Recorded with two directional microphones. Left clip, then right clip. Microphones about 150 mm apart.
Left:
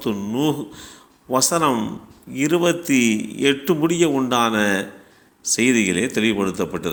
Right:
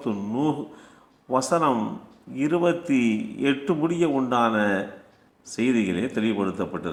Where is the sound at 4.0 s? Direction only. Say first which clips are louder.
Left 4 dB; 35° left (ahead or behind).